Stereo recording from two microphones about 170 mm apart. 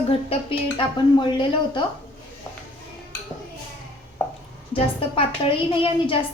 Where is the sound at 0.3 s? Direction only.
35° left (ahead or behind).